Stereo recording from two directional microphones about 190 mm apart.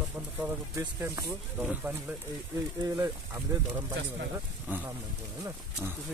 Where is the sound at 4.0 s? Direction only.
80° right.